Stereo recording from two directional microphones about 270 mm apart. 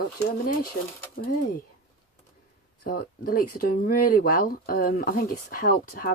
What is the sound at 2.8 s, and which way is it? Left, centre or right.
Speech, left.